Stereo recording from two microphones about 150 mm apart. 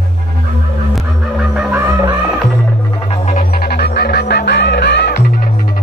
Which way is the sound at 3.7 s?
90° left.